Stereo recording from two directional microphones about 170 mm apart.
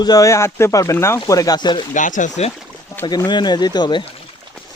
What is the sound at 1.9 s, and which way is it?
Speech, 50° left (ahead or behind).